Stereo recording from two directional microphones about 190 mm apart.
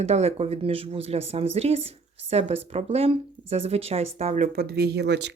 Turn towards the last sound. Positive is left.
turn(degrees=-65)  # may be behind; listen again after turning